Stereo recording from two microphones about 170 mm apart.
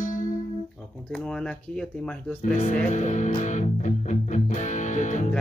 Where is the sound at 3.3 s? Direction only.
45° left (ahead or behind).